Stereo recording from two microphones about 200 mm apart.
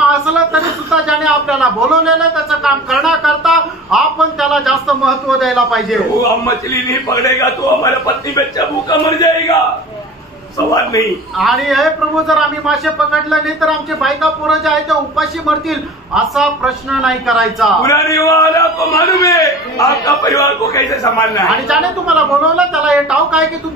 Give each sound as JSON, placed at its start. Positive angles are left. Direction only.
{"t": 0.1, "sound": "a sound", "side_deg": 0}
{"t": 1.0, "sound": "a man's voice", "side_deg": 0}
{"t": 6.4, "sound": "a man's voice", "side_deg": 15}
{"t": 10.7, "sound": "a man's voice", "side_deg": 15}
{"t": 11.3, "sound": "a man's voice", "side_deg": 0}
{"t": 17.8, "sound": "a man's voice", "side_deg": 15}
{"t": 21.5, "sound": "a man's voice", "side_deg": -5}